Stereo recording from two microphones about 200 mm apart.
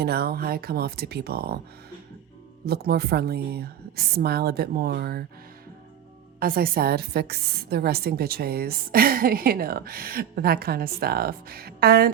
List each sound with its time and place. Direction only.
0.0 s a woman's voice: 50° right (ahead or behind)
2.6 s a woman's voice: 50° right (ahead or behind)
6.4 s a woman's voice: 45° right (ahead or behind)